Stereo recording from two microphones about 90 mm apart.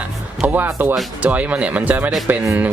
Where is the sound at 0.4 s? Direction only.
20° right (ahead or behind).